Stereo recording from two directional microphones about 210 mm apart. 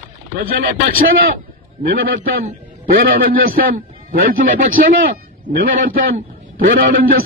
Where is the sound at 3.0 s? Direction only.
45° right (ahead or behind).